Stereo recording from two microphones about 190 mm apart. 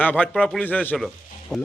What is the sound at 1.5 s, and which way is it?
Speech, 20° left (ahead or behind).